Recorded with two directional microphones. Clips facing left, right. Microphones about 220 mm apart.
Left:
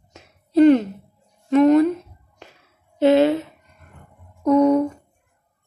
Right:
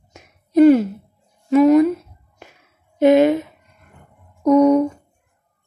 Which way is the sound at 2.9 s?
15° right (ahead or behind).